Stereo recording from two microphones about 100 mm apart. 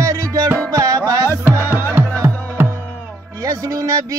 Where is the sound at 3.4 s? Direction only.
35° right (ahead or behind).